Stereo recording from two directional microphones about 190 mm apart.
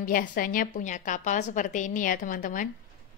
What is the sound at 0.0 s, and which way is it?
A woman's voice, 45° left (ahead or behind).